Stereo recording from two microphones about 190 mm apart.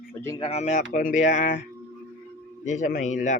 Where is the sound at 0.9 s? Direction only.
45° left (ahead or behind).